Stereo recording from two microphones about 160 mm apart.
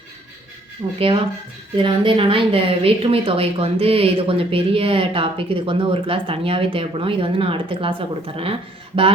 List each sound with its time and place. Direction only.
0.9 s speech: 35° right (ahead or behind)